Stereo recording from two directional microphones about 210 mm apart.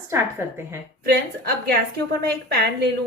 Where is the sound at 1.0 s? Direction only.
45° right (ahead or behind).